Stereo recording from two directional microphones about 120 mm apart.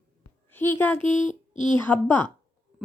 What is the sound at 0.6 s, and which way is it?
A woman's voice, 15° left (ahead or behind).